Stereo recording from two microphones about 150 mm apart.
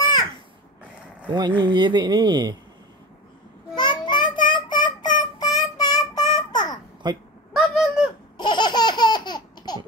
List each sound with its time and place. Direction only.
1.6 s speech: 30° right (ahead or behind)
3.7 s child singing: 30° left (ahead or behind)
7.0 s speech: 30° right (ahead or behind)
7.5 s a sound: centre (ahead or behind)
8.4 s laughter: 30° left (ahead or behind)